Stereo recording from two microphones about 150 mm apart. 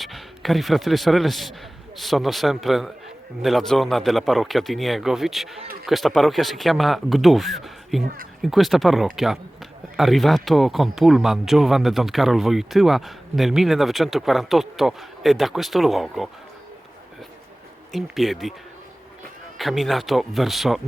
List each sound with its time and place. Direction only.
0.0 s speech: centre (ahead or behind)
8.0 s speech: 70° right (ahead or behind)
8.4 s speech: centre (ahead or behind)
17.9 s speech: centre (ahead or behind)
19.5 s speech: centre (ahead or behind)